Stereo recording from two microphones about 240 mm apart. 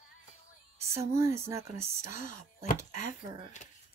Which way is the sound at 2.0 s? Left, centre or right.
Left.